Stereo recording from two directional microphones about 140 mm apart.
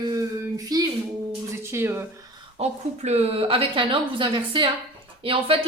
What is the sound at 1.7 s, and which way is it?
Speech, 20° right (ahead or behind).